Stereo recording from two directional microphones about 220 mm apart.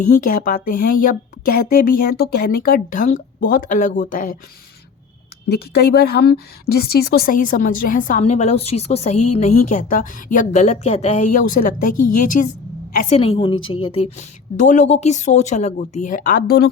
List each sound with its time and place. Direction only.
0.1 s a woman's voice: 40° left (ahead or behind)
5.5 s a woman's voice: 45° left (ahead or behind)